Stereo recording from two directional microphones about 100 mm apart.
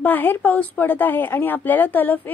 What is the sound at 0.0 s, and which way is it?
A woman's voice, 20° left (ahead or behind).